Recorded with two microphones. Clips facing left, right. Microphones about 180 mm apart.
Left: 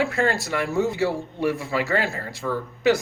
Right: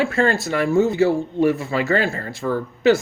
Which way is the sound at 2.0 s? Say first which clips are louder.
Right 4 dB; 50° right (ahead or behind).